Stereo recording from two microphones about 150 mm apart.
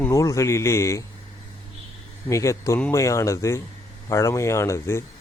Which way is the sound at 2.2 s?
20° left (ahead or behind).